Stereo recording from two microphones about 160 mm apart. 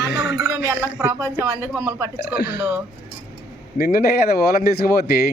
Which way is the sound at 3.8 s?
75° left (ahead or behind).